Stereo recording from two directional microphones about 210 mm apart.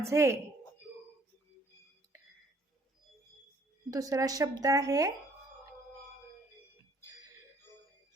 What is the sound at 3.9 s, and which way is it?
A woman's voice, 15° right (ahead or behind).